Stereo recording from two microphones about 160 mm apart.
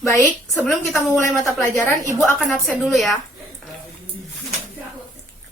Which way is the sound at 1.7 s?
15° left (ahead or behind).